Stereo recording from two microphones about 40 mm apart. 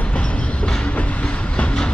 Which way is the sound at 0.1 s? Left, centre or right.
Left.